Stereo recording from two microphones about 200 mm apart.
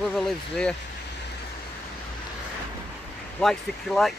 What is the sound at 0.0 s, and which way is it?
Vehicle, 5° left (ahead or behind).